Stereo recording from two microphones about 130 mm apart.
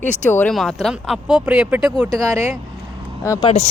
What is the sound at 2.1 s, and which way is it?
Speech, 25° right (ahead or behind).